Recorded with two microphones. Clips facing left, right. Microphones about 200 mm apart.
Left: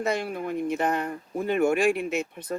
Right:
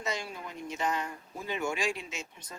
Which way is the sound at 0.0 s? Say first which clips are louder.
Left 9 dB; 60° left (ahead or behind).